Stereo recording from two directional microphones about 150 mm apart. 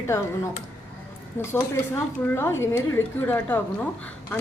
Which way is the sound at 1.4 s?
20° left (ahead or behind).